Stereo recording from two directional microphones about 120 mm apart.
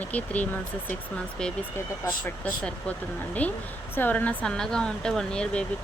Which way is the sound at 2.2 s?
10° left (ahead or behind).